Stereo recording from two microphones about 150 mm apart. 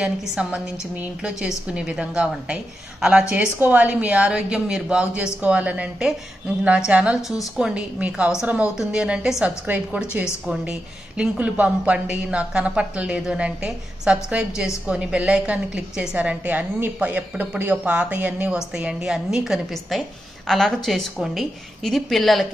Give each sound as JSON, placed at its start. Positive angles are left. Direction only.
{"t": 0.0, "sound": "a woman's voice", "side_deg": -5}